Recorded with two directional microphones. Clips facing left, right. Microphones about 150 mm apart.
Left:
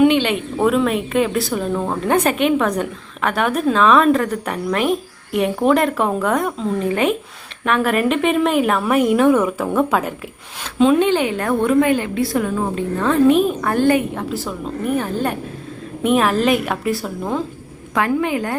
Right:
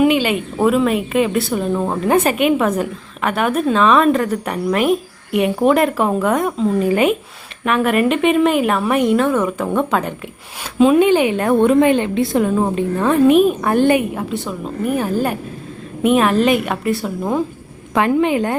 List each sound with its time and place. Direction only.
0.0 s a woman's voice: 5° right (ahead or behind)
10.8 s a woman's voice: 10° right (ahead or behind)
14.3 s a woman's voice: centre (ahead or behind)
17.9 s a woman's voice: 20° right (ahead or behind)